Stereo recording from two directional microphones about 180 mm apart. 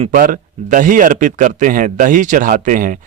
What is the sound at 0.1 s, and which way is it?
Speech, 50° right (ahead or behind).